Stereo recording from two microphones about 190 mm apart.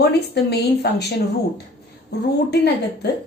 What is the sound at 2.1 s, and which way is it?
Speech, 60° left (ahead or behind).